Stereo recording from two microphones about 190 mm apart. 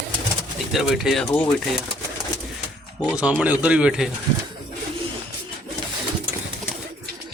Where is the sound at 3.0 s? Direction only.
5° right (ahead or behind).